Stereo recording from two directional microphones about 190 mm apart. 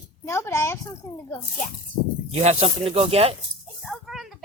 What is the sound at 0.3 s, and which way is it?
Speech, 15° left (ahead or behind).